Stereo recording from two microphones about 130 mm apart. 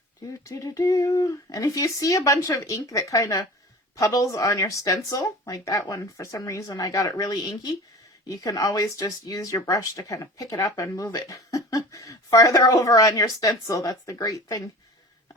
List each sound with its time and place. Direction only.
0.4 s speech: 25° left (ahead or behind)